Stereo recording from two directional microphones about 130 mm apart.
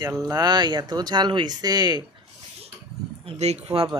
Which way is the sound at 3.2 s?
55° right (ahead or behind).